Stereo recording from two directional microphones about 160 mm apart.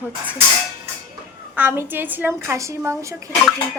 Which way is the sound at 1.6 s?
15° right (ahead or behind).